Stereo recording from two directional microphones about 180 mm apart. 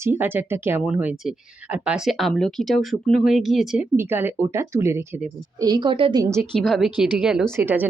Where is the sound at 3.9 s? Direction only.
10° right (ahead or behind).